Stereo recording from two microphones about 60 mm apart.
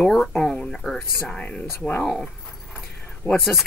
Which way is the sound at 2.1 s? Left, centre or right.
Centre.